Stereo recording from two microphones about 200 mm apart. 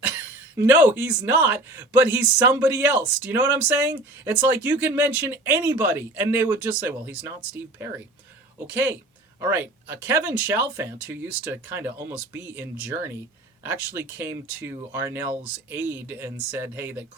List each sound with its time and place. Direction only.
0.2 s speech: 10° right (ahead or behind)
9.4 s speech: 10° right (ahead or behind)
14.2 s speech: 10° right (ahead or behind)